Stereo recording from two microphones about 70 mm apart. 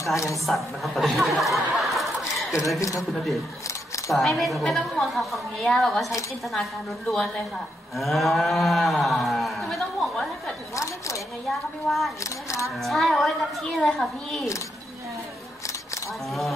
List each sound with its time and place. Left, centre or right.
0.0 s speech: left
0.5 s speech: centre
2.8 s speech: left
4.1 s a woman's voice: centre
7.9 s cattle: centre
10.8 s camera: left
11.4 s a woman's voice: centre
12.2 s speech: left
12.7 s a woman's voice: centre
16.3 s a woman's voice: centre